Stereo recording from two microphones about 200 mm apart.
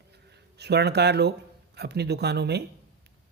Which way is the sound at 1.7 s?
55° right (ahead or behind).